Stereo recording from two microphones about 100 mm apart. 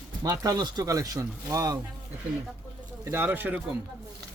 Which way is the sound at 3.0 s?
20° right (ahead or behind).